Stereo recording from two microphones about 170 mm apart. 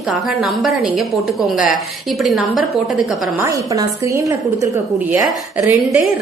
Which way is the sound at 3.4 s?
20° right (ahead or behind).